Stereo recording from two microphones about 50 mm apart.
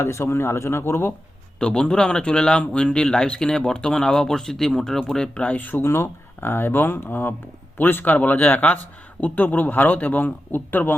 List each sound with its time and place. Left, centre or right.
0.0 s speech: left
1.5 s speech: centre; by 5.8 s left
5.8 s speech: left
6.5 s a man's voice: left